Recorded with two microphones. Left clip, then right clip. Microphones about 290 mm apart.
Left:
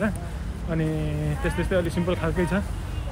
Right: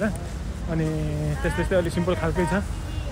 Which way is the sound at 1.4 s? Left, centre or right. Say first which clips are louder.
Right 2 dB; centre.